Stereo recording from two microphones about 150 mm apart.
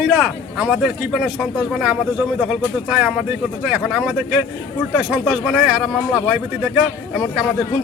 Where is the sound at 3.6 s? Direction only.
5° right (ahead or behind).